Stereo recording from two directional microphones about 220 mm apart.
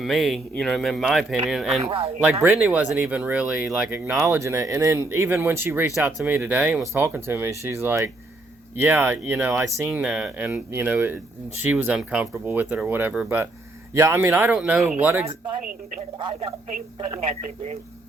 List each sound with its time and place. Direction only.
0.0 s speech: centre (ahead or behind)
16.0 s speech: 25° right (ahead or behind)